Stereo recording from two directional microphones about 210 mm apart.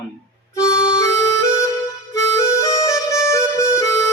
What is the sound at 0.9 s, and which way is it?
Music, 15° left (ahead or behind).